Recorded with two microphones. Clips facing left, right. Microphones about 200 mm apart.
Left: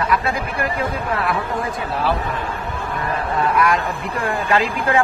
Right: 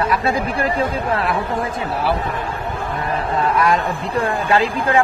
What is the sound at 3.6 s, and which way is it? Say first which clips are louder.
Speech: right 1 dB; 30° right (ahead or behind).